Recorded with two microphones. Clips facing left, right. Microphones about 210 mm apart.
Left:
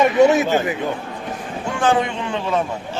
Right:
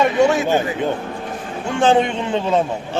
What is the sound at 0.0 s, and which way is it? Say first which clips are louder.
Speech: left 2 dB; 20° left (ahead or behind).